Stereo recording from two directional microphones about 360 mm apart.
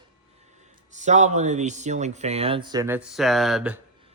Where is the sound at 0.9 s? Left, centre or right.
Centre.